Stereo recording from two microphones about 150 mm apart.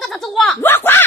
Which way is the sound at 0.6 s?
15° left (ahead or behind).